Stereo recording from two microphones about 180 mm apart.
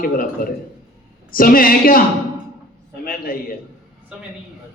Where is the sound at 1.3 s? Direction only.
50° left (ahead or behind).